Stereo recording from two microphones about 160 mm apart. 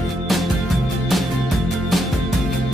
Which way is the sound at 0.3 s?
Centre (ahead or behind).